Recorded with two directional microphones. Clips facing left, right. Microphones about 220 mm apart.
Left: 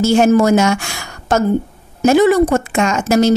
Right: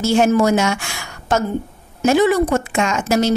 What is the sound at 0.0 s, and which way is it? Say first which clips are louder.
A woman's voice: left 3 dB; 45° left (ahead or behind).